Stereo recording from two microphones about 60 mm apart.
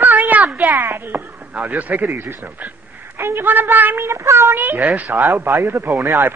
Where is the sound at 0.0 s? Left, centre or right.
Right.